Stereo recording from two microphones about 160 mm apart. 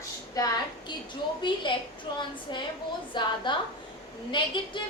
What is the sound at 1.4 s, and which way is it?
A woman's voice, 30° left (ahead or behind).